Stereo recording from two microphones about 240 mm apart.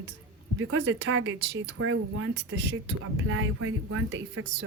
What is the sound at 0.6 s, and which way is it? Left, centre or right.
A woman's voice, right.